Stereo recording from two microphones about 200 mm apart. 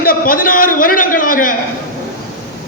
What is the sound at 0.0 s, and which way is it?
A man's voice, 45° left (ahead or behind).